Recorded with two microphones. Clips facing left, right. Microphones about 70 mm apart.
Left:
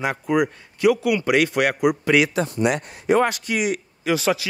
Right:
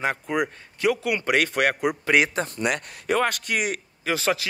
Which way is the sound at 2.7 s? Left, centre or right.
Left.